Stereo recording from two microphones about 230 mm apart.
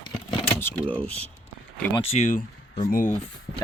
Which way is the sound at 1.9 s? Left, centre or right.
Left.